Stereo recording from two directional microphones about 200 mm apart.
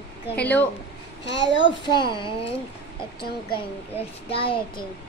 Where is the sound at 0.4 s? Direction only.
10° left (ahead or behind).